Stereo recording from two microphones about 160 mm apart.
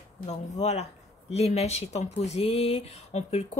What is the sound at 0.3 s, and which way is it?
Speech, 45° left (ahead or behind).